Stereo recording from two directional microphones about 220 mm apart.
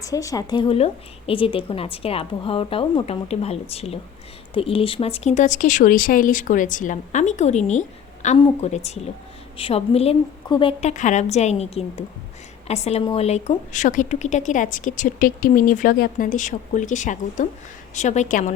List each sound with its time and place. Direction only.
0.0 s a woman's voice: 15° left (ahead or behind); by 18.5 s 35° left (ahead or behind)